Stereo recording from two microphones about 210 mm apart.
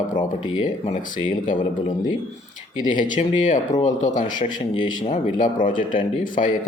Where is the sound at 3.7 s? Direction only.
20° left (ahead or behind).